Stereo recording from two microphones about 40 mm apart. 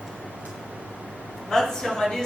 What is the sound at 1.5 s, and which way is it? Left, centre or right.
Speech, centre.